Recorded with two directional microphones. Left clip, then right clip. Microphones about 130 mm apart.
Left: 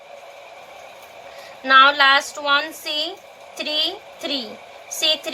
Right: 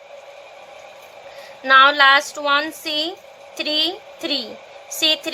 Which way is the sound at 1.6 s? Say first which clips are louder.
Right 1 dB; 55° right (ahead or behind).